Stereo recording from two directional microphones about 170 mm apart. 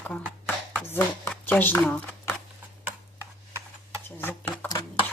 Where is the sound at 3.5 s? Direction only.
15° right (ahead or behind).